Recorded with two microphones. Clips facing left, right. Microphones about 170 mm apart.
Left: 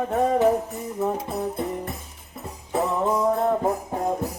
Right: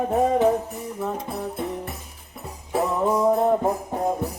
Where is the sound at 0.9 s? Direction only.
15° left (ahead or behind).